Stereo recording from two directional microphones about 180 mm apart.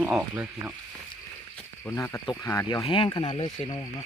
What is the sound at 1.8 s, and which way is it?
Speech, 15° left (ahead or behind).